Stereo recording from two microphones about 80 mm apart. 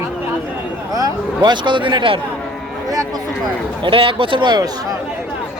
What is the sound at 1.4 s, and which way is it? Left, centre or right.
Speech, right.